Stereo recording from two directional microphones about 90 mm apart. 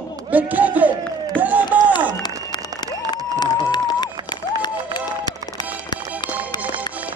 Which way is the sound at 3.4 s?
55° left (ahead or behind).